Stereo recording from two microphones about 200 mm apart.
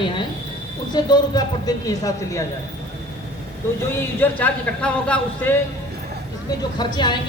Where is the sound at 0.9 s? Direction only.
20° left (ahead or behind).